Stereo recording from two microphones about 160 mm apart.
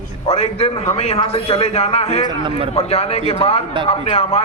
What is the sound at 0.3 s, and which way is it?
A man's voice, 40° left (ahead or behind).